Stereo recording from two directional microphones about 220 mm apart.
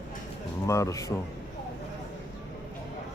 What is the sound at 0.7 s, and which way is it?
Speech, 15° left (ahead or behind).